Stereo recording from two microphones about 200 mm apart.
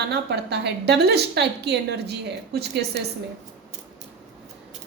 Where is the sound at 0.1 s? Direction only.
55° right (ahead or behind).